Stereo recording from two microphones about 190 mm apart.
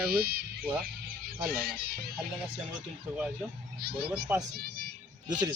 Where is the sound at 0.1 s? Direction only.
55° right (ahead or behind).